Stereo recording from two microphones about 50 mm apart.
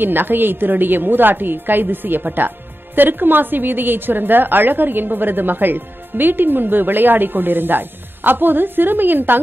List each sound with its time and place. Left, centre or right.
0.0 s a woman's voice: right